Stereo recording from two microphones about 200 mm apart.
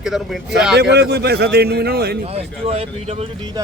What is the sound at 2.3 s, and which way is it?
Speech, 30° right (ahead or behind).